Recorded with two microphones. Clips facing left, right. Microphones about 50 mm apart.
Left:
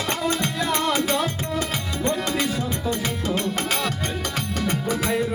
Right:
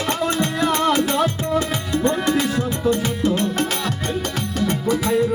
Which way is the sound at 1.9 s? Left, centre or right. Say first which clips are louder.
Right 6 dB; right.